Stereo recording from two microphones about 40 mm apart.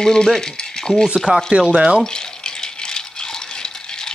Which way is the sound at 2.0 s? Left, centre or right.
Centre.